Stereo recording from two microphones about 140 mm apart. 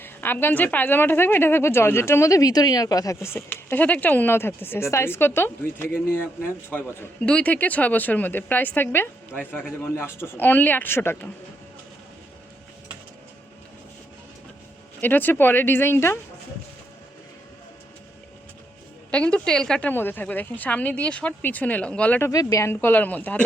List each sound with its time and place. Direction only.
0.0 s a woman's voice: 15° left (ahead or behind)
6.7 s a woman's voice: 15° left (ahead or behind)
15.0 s a woman's voice: 15° left (ahead or behind)
19.1 s a woman's voice: 10° left (ahead or behind)
22.3 s a woman's voice: 25° left (ahead or behind)